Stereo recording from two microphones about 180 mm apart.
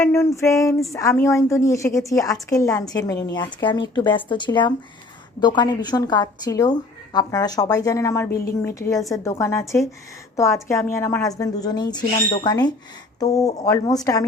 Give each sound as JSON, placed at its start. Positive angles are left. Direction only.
{"t": 0.0, "sound": "a woman's voice", "side_deg": 15}